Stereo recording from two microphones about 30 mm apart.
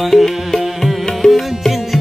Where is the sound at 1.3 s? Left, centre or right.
Centre.